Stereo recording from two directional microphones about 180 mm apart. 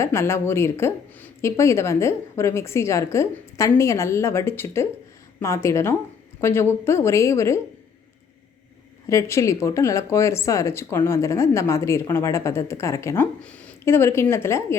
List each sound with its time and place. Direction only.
0.0 s speech: 15° left (ahead or behind)
9.0 s speech: 15° left (ahead or behind)